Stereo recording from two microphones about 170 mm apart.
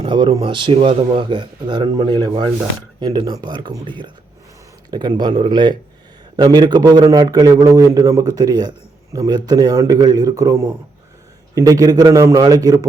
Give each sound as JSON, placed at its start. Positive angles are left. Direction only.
{"t": 0.0, "sound": "speech", "side_deg": -30}